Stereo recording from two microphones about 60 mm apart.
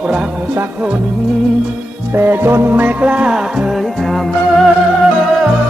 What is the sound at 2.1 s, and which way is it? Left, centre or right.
Music, right.